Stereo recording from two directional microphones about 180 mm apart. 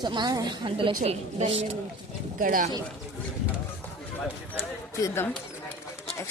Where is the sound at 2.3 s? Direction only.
50° right (ahead or behind).